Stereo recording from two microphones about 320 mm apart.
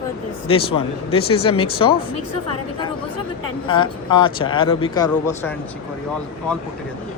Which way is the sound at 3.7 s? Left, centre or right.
Centre.